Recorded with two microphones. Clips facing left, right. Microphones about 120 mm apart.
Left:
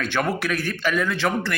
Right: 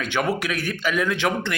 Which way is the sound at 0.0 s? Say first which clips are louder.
Even; 15° right (ahead or behind).